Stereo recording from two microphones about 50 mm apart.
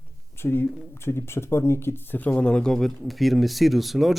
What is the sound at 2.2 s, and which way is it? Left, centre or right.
Speech, left.